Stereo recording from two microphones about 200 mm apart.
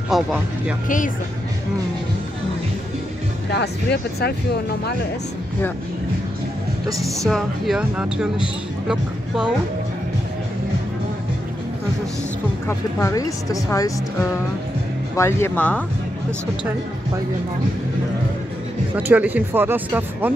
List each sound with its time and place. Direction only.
0.1 s speech: centre (ahead or behind)
0.8 s speech: 40° left (ahead or behind)
3.5 s speech: 55° left (ahead or behind)
6.9 s speech: 15° right (ahead or behind)
7.2 s speech: centre (ahead or behind)
12.6 s speech: 15° left (ahead or behind)
15.1 s speech: 10° left (ahead or behind)
18.9 s speech: 10° right (ahead or behind)